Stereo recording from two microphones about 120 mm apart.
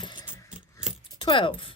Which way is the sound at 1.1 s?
40° left (ahead or behind).